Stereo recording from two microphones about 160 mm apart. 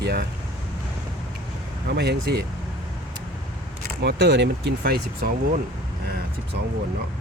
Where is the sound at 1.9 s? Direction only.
90° right.